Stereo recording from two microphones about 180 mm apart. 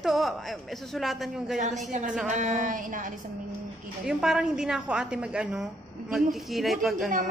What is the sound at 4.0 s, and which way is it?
A woman's voice, 5° right (ahead or behind).